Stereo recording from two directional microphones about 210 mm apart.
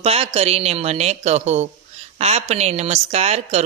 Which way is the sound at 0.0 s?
30° right (ahead or behind).